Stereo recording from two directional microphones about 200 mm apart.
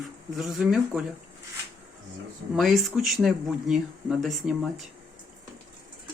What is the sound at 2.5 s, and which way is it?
Speech, centre (ahead or behind).